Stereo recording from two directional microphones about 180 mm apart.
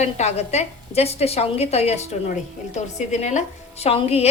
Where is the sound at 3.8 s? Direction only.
35° left (ahead or behind).